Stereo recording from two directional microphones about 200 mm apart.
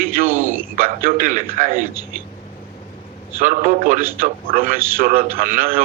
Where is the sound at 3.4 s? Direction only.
40° right (ahead or behind).